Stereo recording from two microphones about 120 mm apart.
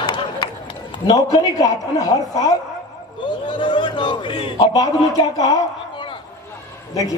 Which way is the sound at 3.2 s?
40° left (ahead or behind).